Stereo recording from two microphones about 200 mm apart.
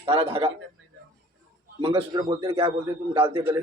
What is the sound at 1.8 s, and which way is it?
A man's voice, 25° right (ahead or behind).